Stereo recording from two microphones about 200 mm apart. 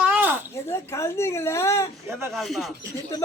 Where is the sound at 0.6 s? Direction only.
15° left (ahead or behind).